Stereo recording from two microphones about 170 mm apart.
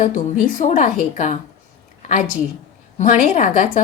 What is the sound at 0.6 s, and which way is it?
A woman's voice, 45° left (ahead or behind).